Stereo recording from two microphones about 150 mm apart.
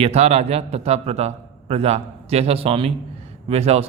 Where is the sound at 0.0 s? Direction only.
45° right (ahead or behind).